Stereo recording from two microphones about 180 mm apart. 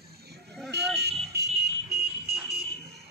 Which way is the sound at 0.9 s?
65° right (ahead or behind).